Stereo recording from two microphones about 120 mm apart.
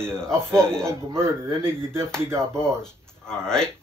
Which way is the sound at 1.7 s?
20° right (ahead or behind).